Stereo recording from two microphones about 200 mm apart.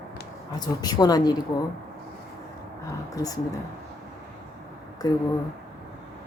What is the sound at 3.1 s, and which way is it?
Speech, 20° left (ahead or behind).